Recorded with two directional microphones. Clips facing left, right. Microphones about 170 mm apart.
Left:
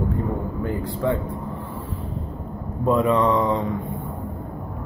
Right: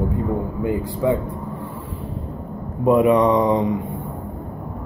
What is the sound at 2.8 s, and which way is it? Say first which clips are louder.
Speech: right 4 dB; 15° right (ahead or behind).